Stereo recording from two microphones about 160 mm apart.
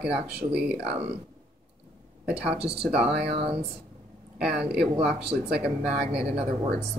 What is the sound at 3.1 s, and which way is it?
Speech, 90° right.